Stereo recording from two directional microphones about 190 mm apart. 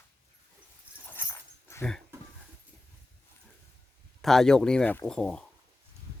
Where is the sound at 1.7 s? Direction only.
15° left (ahead or behind).